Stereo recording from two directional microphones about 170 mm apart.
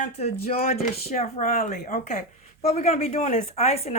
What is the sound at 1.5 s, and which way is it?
A woman's voice, 55° left (ahead or behind).